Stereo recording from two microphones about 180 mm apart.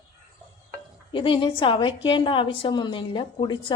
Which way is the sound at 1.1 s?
30° left (ahead or behind).